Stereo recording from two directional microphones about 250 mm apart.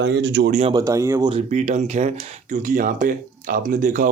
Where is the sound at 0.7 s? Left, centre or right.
Centre.